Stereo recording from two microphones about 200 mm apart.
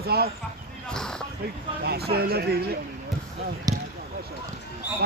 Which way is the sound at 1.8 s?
50° right (ahead or behind).